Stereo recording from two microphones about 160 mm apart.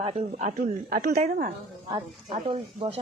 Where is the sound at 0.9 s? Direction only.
65° right (ahead or behind).